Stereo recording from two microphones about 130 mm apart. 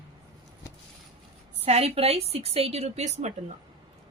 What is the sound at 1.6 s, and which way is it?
A woman's voice, 55° right (ahead or behind).